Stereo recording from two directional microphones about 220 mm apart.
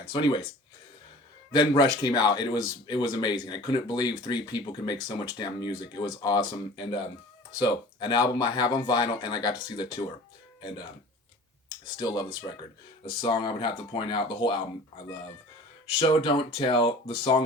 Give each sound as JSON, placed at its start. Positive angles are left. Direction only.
{"t": 0.0, "sound": "speech", "side_deg": 20}
{"t": 1.5, "sound": "speech", "side_deg": 20}
{"t": 11.9, "sound": "speech", "side_deg": 20}
{"t": 16.0, "sound": "speech", "side_deg": 25}